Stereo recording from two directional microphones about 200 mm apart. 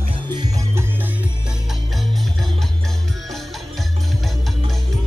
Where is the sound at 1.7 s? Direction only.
Centre (ahead or behind).